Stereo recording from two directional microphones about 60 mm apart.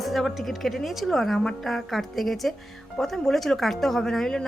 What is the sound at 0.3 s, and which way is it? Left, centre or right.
Speech, centre.